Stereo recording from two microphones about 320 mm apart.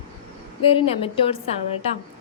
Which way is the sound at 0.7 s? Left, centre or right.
Centre.